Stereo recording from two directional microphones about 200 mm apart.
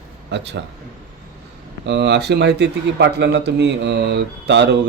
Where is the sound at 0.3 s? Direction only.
60° right (ahead or behind).